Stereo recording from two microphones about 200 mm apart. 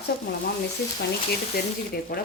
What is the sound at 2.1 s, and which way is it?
Speech, 45° left (ahead or behind).